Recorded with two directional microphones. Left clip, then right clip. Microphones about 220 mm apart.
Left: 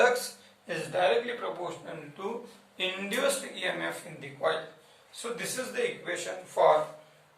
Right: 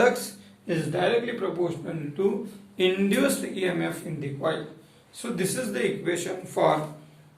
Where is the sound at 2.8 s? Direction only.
25° right (ahead or behind).